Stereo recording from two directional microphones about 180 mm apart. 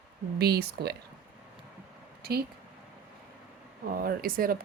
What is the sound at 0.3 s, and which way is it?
Speech, 60° right (ahead or behind).